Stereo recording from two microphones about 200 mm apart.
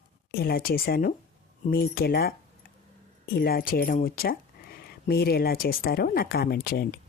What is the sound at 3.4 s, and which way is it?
Speech, 50° left (ahead or behind).